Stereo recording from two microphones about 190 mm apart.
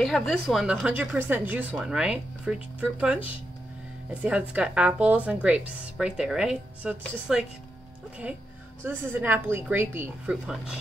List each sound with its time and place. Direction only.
0.0 s speech: centre (ahead or behind)
8.8 s speech: 10° right (ahead or behind)